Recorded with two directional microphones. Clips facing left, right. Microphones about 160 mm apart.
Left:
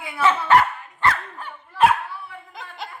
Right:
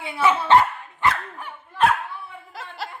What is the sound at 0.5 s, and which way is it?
Dog, 25° right (ahead or behind).